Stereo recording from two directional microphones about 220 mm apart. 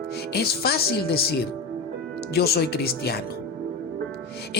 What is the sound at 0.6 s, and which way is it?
Speech, 45° left (ahead or behind).